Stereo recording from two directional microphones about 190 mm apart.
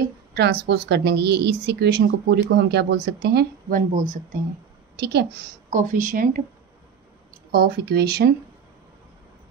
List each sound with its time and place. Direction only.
0.3 s a woman's voice: 60° right (ahead or behind); by 4.2 s 45° right (ahead or behind)
4.9 s a woman's voice: 60° right (ahead or behind)
5.7 s speech: 40° right (ahead or behind)
7.5 s a woman's voice: 55° right (ahead or behind)